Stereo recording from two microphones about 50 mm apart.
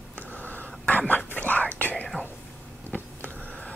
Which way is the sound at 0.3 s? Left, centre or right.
Left.